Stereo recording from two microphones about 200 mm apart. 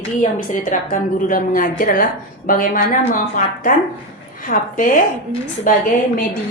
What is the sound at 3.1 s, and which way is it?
A woman's voice, 40° left (ahead or behind).